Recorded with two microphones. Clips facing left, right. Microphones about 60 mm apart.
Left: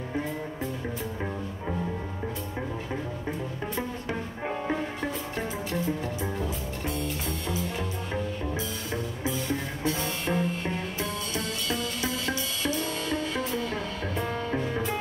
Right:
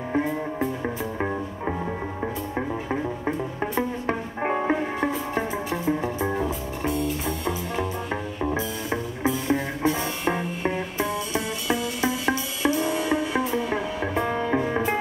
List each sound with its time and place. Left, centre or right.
0.8 s music: right
2.9 s music: right
5.3 s music: centre
6.9 s music: centre
8.4 s music: right